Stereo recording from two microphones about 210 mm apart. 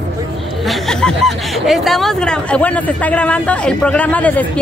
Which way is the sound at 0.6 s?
Centre (ahead or behind).